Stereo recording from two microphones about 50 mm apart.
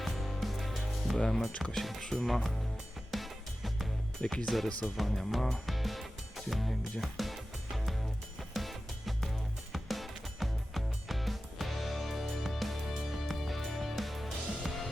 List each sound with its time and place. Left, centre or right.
0.0 s music: centre
1.7 s speech: centre
2.2 s speech: centre
3.1 s music: centre
4.2 s speech: left
4.4 s speech: centre
4.9 s music: centre